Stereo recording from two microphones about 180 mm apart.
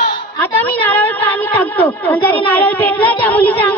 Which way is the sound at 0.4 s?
10° left (ahead or behind).